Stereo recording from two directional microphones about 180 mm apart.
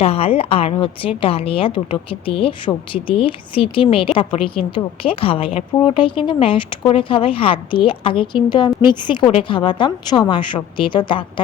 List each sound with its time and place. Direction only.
0.0 s a woman's voice: 35° left (ahead or behind)